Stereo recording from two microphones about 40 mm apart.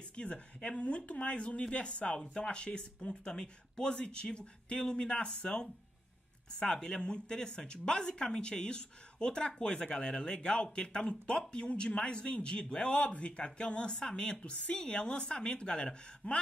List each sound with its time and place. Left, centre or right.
0.1 s speech: left